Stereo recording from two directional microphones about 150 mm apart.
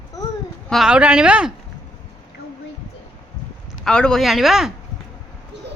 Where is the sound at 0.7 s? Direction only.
5° right (ahead or behind).